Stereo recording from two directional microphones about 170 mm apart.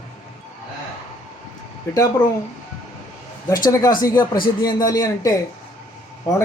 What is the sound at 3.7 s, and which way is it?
A man's voice, 20° left (ahead or behind).